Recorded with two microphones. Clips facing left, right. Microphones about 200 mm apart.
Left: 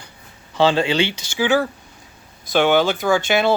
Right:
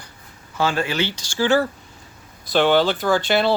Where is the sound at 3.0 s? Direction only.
10° left (ahead or behind).